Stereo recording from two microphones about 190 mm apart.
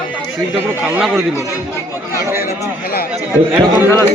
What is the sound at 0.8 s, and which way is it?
Speech, 5° right (ahead or behind).